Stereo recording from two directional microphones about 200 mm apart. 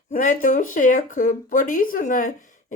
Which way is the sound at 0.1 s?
40° left (ahead or behind).